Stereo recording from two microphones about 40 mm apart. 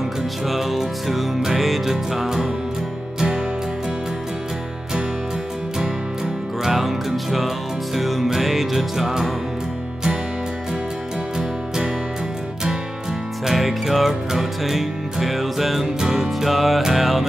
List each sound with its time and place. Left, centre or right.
0.5 s music: centre
6.6 s music: centre
11.3 s music: centre
13.5 s music: centre